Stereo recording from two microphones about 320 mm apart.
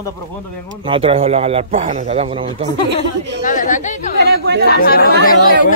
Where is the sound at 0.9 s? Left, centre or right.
Centre.